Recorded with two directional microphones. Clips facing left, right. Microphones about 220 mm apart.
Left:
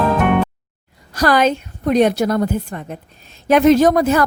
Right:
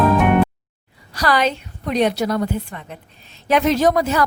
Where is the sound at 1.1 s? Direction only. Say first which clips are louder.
Left 4 dB; 45° left (ahead or behind).